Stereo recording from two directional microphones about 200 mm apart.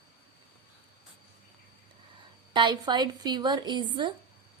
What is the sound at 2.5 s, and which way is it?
A woman's voice, 20° right (ahead or behind).